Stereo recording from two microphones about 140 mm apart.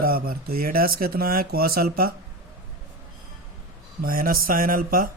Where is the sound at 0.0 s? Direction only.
90° right.